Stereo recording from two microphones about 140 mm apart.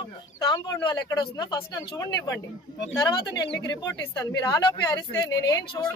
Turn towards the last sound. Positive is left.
turn(degrees=25)  # may be behind; listen again after turning